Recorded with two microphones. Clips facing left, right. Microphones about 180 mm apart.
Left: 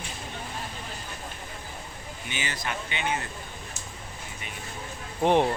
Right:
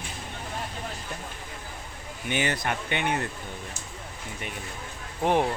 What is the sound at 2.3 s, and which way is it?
Speech, 60° right (ahead or behind).